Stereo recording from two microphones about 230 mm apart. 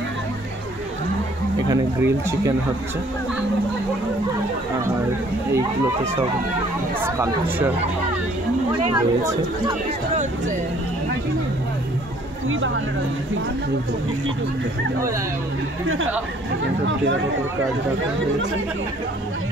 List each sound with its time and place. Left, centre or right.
1.7 s speech: centre
7.0 s speech: centre
8.7 s speech: centre
16.8 s speech: right